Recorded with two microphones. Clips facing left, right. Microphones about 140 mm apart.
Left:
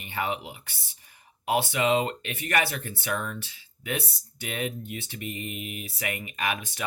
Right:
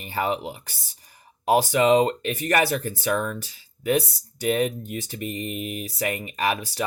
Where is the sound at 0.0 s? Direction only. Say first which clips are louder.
Right 5 dB; 40° right (ahead or behind).